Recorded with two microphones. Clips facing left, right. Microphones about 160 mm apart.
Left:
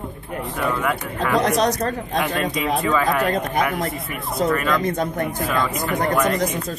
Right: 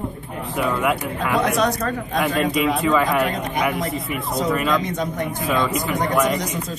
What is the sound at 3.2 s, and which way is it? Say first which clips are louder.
Speech: left 3 dB; 50° left (ahead or behind).